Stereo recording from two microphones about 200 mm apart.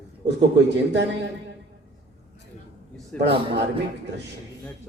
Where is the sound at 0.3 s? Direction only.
60° right (ahead or behind).